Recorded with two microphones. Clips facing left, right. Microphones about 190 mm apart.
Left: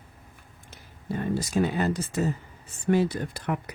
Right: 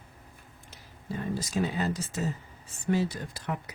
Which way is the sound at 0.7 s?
60° left (ahead or behind).